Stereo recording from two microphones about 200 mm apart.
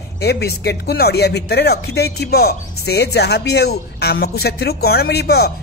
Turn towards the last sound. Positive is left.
turn(degrees=55)  # may be behind; listen again after turning